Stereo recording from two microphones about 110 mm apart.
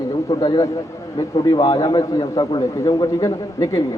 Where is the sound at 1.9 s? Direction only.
35° left (ahead or behind).